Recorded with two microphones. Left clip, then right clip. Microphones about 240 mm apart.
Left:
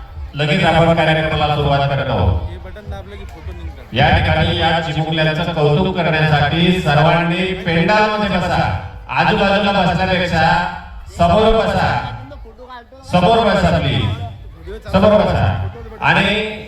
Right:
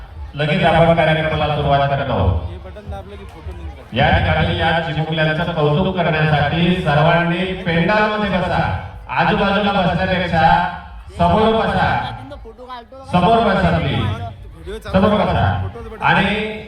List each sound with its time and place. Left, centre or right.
0.3 s a man's voice: left
3.9 s a man's voice: left
13.1 s a man's voice: left